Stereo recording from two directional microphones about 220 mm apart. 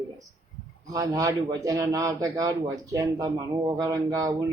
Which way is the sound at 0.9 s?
15° right (ahead or behind).